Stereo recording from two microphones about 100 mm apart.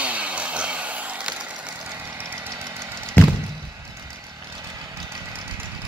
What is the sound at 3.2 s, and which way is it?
Knock, 20° left (ahead or behind).